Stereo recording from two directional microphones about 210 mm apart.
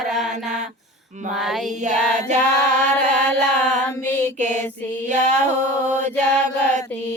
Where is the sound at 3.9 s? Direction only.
10° left (ahead or behind).